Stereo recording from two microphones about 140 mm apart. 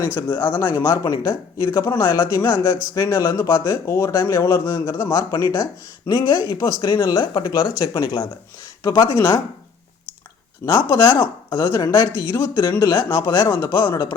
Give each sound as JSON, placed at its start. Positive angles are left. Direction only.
{"t": 0.0, "sound": "speech", "side_deg": 15}
{"t": 0.9, "sound": "speech", "side_deg": 25}
{"t": 5.0, "sound": "speech", "side_deg": 30}
{"t": 10.7, "sound": "speech", "side_deg": 25}